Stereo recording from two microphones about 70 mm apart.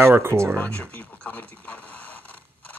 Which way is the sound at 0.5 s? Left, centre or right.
Centre.